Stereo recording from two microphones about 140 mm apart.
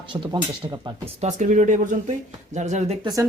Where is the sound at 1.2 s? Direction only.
60° right (ahead or behind).